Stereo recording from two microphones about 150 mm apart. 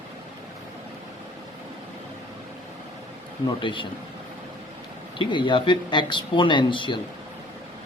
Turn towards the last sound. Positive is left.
turn(degrees=30)  # may be behind; listen again after turning